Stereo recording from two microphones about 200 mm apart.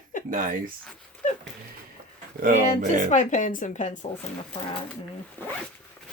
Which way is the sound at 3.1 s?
35° left (ahead or behind).